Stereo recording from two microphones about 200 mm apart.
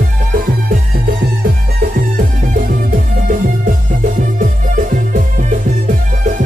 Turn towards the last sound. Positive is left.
turn(degrees=-40)  # may be behind; listen again after turning